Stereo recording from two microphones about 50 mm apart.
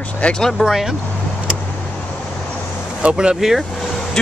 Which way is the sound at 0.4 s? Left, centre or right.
Centre.